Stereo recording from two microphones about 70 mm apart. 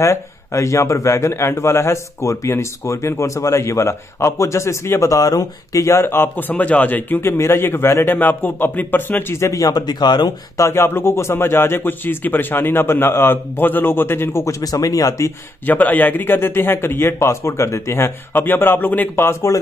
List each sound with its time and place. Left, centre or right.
0.0 s a man's voice: left
6.2 s a man's voice: left
9.3 s speech: left
10.6 s a man's voice: left
14.4 s speech: left
15.6 s a man's voice: left
18.3 s a man's voice: left